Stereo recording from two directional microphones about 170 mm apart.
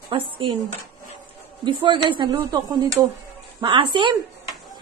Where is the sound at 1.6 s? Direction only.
30° right (ahead or behind).